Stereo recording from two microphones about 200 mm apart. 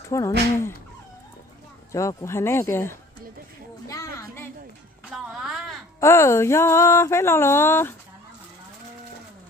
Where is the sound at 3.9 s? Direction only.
15° left (ahead or behind).